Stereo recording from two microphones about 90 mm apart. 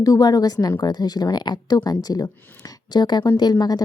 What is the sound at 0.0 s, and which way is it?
Speech, 45° left (ahead or behind).